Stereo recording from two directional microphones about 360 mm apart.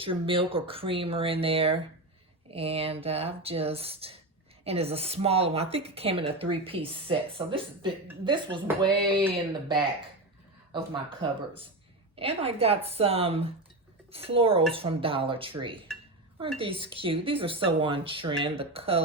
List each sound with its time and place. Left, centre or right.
0.0 s speech: centre
11.2 s speech: centre